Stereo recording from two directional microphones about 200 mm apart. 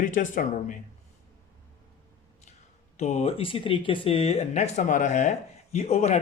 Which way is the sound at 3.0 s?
35° left (ahead or behind).